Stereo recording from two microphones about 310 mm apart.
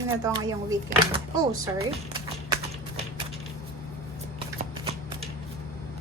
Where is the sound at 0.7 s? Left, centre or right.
Centre.